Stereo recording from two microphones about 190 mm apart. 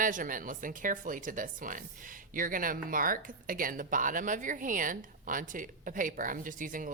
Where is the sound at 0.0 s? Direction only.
45° right (ahead or behind).